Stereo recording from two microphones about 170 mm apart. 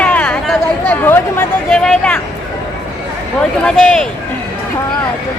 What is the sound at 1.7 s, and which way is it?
Vehicle, 5° left (ahead or behind).